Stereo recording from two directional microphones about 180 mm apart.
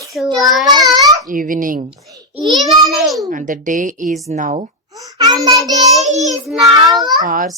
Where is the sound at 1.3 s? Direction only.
50° right (ahead or behind).